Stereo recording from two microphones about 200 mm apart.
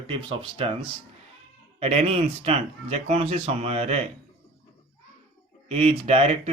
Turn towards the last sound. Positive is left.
turn(degrees=-30)  # may be behind; listen again after turning